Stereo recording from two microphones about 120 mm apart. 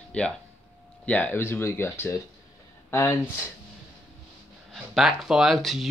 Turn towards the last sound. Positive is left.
turn(degrees=0)  # may be behind; listen again after turning